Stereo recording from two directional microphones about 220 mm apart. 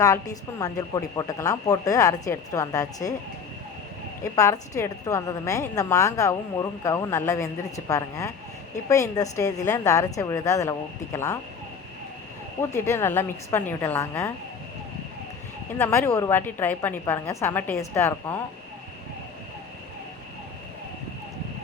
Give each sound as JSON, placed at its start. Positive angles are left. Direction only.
{"t": 0.0, "sound": "a woman's voice", "side_deg": 15}
{"t": 4.2, "sound": "a woman's voice", "side_deg": 15}
{"t": 12.7, "sound": "a woman's voice", "side_deg": 10}
{"t": 15.8, "sound": "a woman's voice", "side_deg": 10}